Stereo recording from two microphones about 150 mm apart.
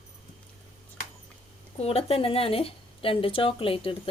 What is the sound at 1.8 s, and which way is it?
Speech, 40° left (ahead or behind).